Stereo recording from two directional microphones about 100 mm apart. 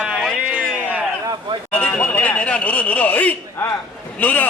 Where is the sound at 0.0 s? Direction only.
10° right (ahead or behind).